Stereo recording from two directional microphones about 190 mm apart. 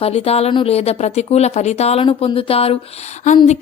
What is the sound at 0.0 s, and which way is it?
A woman's voice, 35° left (ahead or behind).